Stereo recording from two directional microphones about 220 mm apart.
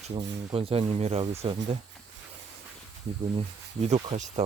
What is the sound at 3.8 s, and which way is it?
Speech, 30° right (ahead or behind).